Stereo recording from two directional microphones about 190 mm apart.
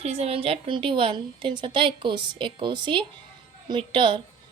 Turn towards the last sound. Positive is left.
turn(degrees=-25)  # may be behind; listen again after turning